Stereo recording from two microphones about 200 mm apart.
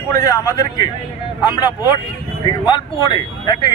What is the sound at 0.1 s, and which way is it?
A man's voice, 20° left (ahead or behind).